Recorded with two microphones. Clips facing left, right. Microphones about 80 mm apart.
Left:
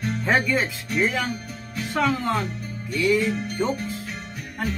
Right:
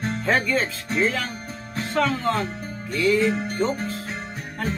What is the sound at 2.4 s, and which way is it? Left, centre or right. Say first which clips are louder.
Music: right 1 dB; right.